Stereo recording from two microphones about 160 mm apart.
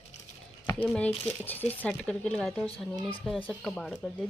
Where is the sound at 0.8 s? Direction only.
10° left (ahead or behind).